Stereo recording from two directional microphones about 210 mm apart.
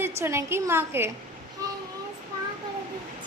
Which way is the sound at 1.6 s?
20° right (ahead or behind).